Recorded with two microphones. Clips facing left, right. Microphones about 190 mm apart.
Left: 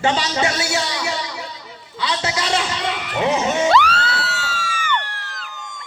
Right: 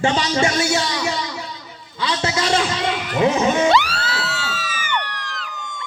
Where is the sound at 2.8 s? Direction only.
40° right (ahead or behind).